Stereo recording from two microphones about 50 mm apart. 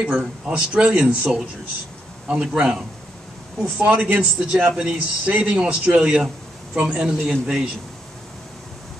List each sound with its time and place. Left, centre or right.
0.5 s a man's voice: centre
4.5 s a man's voice: centre